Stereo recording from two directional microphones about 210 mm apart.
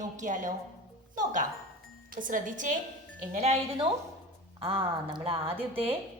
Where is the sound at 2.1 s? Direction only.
40° right (ahead or behind).